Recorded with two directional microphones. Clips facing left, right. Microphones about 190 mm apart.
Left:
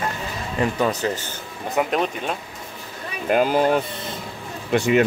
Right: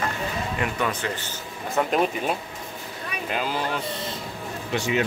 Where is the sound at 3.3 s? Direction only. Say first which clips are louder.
Left 10 dB; 50° left (ahead or behind).